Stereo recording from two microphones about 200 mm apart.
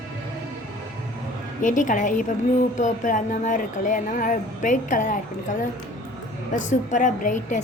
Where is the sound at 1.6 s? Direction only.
40° left (ahead or behind).